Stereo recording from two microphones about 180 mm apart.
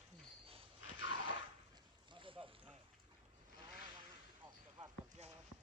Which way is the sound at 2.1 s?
30° right (ahead or behind).